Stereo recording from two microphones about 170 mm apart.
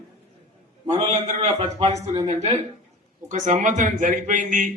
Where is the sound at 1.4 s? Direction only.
40° right (ahead or behind).